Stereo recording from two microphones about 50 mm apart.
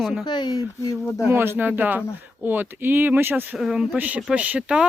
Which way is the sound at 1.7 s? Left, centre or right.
Right.